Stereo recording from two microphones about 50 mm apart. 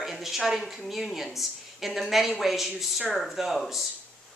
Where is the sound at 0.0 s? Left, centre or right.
Centre.